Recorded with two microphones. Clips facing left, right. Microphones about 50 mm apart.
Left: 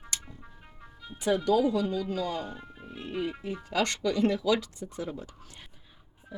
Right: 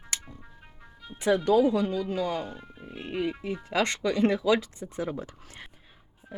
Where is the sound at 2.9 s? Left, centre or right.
Centre; by 5.7 s right.